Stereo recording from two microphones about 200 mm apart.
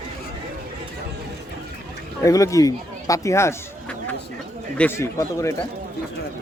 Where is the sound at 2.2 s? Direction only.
15° left (ahead or behind).